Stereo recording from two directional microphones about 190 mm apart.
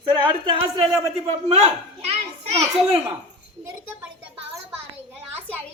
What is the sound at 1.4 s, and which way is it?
A child's voice, 30° right (ahead or behind).